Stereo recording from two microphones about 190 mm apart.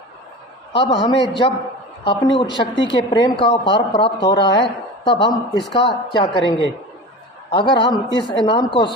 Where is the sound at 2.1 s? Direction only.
25° left (ahead or behind).